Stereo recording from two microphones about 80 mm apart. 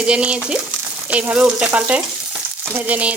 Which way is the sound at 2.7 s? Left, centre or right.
Centre.